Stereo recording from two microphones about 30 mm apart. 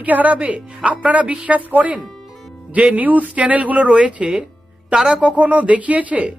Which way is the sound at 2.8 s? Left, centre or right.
Right.